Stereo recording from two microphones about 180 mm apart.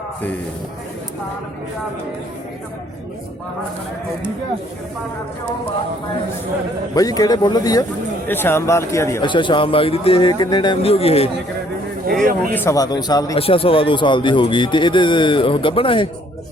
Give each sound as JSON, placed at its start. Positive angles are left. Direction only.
{"t": 6.9, "sound": "a man's voice", "side_deg": 20}
{"t": 9.2, "sound": "a man's voice", "side_deg": 25}
{"t": 12.5, "sound": "a man's voice", "side_deg": 15}